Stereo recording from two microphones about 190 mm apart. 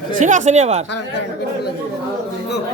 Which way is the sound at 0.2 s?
40° right (ahead or behind).